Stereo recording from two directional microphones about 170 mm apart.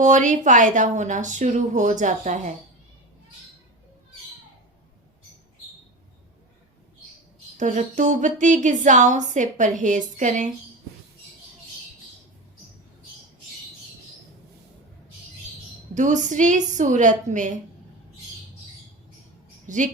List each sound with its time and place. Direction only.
0.0 s speech: 45° right (ahead or behind)
7.6 s speech: 45° right (ahead or behind)
16.0 s speech: 45° right (ahead or behind)
19.6 s a sound: 50° right (ahead or behind)